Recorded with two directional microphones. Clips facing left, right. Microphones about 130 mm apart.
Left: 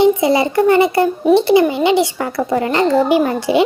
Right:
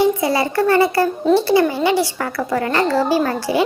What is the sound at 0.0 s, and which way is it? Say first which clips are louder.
A child's voice: left 4 dB; 20° left (ahead or behind).